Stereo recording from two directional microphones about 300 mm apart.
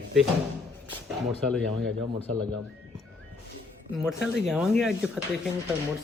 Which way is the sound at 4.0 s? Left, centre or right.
Centre.